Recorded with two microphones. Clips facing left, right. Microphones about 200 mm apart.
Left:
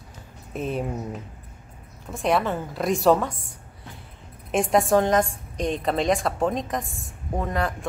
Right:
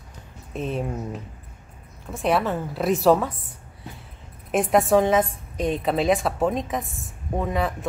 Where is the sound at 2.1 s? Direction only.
Centre (ahead or behind).